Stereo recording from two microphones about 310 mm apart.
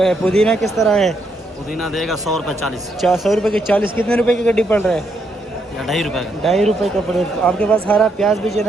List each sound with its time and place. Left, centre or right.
0.0 s speech: centre